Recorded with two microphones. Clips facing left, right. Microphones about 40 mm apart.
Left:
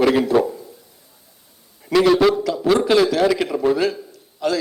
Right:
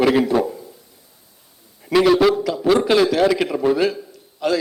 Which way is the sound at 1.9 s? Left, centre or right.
Centre.